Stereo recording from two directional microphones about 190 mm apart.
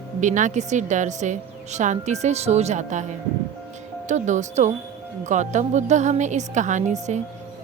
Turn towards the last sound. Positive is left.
turn(degrees=-40)  # may be behind; listen again after turning